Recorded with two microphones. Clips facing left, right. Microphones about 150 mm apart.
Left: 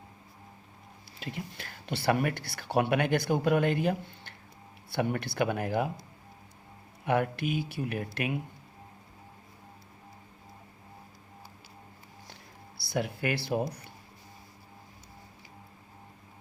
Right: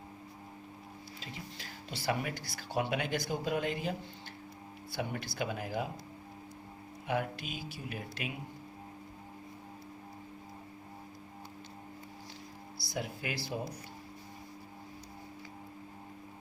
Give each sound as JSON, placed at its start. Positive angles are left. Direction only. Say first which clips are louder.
{"t": 1.2, "sound": "speech", "louder": "left 9 dB", "side_deg": 60}
{"t": 7.0, "sound": "speech", "louder": "left 7 dB", "side_deg": 60}
{"t": 12.8, "sound": "speech", "louder": "left 7 dB", "side_deg": 65}